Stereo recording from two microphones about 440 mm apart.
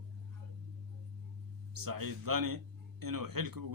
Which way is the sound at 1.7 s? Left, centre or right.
Right.